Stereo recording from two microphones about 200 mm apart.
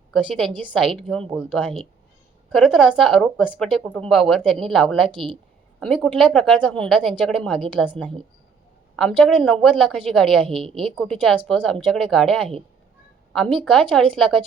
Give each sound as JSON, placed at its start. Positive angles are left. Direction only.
{"t": 0.1, "sound": "speech", "side_deg": 0}
{"t": 5.0, "sound": "a woman's voice", "side_deg": -25}
{"t": 5.8, "sound": "speech", "side_deg": 5}